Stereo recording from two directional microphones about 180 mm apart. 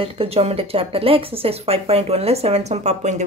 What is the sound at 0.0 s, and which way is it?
A woman's voice, 30° right (ahead or behind).